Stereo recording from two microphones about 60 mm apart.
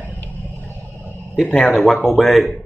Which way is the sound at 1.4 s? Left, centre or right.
Left.